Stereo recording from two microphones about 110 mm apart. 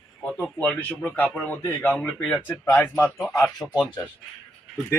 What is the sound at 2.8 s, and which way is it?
Speech, 20° left (ahead or behind).